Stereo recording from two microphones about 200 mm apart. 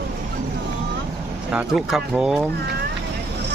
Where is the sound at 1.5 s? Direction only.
Centre (ahead or behind).